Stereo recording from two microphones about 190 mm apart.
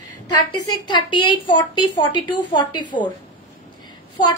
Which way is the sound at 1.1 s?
25° left (ahead or behind).